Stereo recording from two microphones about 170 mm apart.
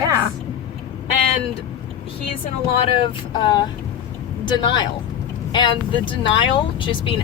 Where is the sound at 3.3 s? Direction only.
25° left (ahead or behind).